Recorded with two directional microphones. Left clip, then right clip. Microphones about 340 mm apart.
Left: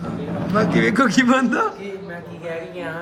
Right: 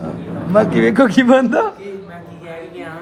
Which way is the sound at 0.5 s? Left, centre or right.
Centre.